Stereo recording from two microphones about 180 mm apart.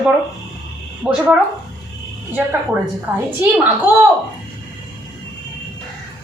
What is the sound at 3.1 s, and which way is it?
A woman's voice, 10° right (ahead or behind).